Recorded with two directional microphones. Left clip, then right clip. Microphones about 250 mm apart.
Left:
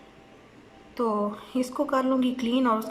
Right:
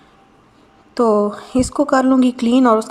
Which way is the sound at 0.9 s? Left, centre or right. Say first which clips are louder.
Right 12 dB; right.